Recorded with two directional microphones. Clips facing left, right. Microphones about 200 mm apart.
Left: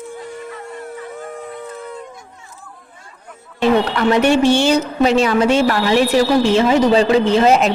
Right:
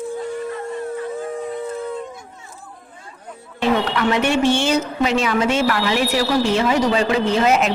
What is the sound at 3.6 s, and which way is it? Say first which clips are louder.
A woman's voice: left 4 dB; 35° left (ahead or behind).